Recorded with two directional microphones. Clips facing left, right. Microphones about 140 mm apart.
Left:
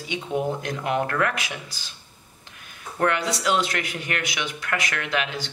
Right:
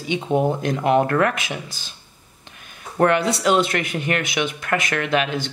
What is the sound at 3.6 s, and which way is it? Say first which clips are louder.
Speech: right 6 dB; 25° right (ahead or behind).